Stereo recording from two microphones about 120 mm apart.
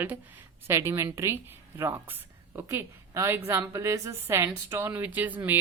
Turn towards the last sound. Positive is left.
turn(degrees=-15)  # may be behind; listen again after turning